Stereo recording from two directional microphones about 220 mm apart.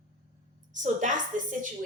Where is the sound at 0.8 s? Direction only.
35° right (ahead or behind).